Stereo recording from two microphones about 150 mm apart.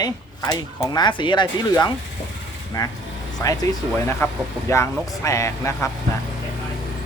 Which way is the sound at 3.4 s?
25° left (ahead or behind).